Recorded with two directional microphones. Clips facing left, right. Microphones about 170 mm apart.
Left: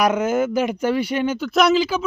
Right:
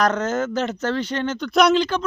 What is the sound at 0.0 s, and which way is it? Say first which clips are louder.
Speech: left 2 dB; 10° left (ahead or behind).